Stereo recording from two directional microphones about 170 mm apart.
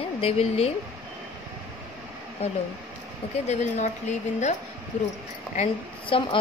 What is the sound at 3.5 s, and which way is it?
A woman's voice, 40° left (ahead or behind).